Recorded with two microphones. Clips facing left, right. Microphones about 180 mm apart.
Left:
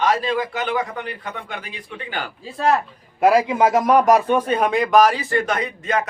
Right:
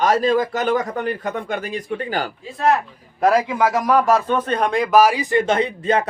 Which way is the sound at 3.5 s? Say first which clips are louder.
Left 2 dB; 20° left (ahead or behind).